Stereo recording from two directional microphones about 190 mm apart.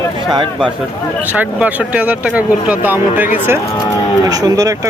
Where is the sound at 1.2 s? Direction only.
10° right (ahead or behind).